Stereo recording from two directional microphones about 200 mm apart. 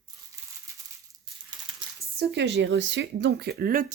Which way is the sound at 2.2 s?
60° right (ahead or behind).